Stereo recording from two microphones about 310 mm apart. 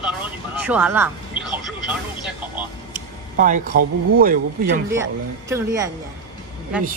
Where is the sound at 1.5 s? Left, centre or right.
Centre.